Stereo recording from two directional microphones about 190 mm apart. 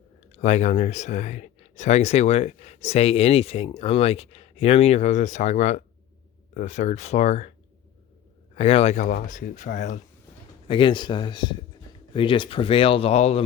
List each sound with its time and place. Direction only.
0.3 s speech: 35° left (ahead or behind)
8.5 s speech: 30° left (ahead or behind)
10.7 s speech: 25° left (ahead or behind)